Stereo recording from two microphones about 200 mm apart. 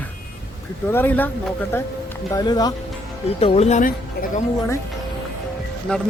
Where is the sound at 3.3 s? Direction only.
30° left (ahead or behind).